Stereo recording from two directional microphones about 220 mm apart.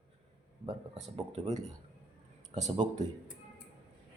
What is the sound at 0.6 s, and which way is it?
A man's voice, 30° right (ahead or behind).